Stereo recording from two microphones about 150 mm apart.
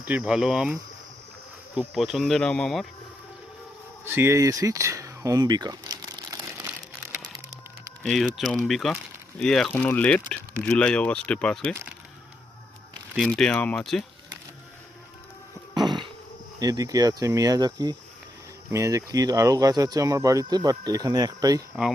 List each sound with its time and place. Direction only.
0.0 s speech: 10° right (ahead or behind)
1.7 s insect: 5° right (ahead or behind)
4.0 s a sound: 15° right (ahead or behind)
8.0 s insect: centre (ahead or behind)
9.4 s speech: 5° left (ahead or behind)
13.1 s insect: 5° left (ahead or behind)
15.7 s a sound: 30° right (ahead or behind)
16.6 s speech: 25° right (ahead or behind)